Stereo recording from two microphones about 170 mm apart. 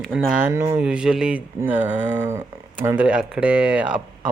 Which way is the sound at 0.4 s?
15° right (ahead or behind).